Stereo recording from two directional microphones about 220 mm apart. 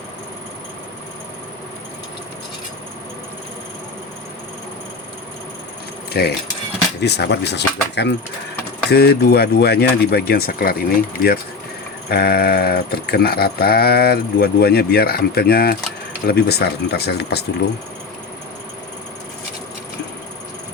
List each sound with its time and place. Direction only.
6.1 s speech: 45° left (ahead or behind)